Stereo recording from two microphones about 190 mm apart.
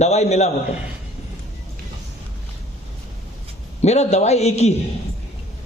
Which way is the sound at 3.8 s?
35° left (ahead or behind).